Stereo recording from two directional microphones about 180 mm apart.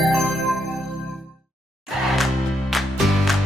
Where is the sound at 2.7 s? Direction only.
Centre (ahead or behind).